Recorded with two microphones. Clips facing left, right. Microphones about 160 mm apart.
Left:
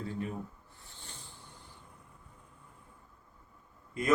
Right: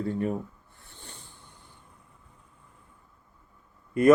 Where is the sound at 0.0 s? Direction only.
55° right (ahead or behind).